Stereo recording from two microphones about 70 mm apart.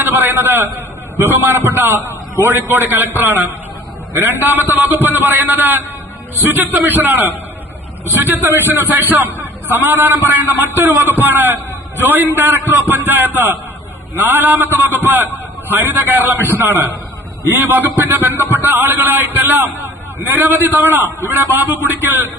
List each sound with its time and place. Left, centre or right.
0.0 s a man's voice: right